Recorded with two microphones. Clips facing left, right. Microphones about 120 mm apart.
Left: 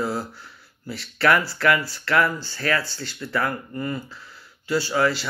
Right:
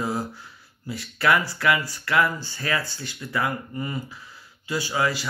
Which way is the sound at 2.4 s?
20° right (ahead or behind).